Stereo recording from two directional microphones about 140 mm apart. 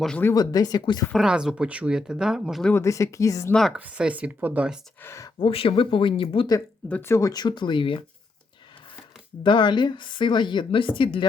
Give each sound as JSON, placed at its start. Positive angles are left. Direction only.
{"t": 0.3, "sound": "speech", "side_deg": 30}
{"t": 1.1, "sound": "speech", "side_deg": -5}
{"t": 2.7, "sound": "speech", "side_deg": 20}
{"t": 3.5, "sound": "speech", "side_deg": 0}
{"t": 3.8, "sound": "speech", "side_deg": -10}
{"t": 4.9, "sound": "speech", "side_deg": 20}
{"t": 5.4, "sound": "a woman's voice", "side_deg": 40}
{"t": 6.8, "sound": "a woman's voice", "side_deg": 15}
{"t": 9.4, "sound": "a woman's voice", "side_deg": 35}